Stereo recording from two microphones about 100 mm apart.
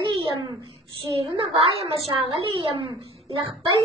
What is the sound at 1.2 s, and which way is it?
Speech, 70° right (ahead or behind).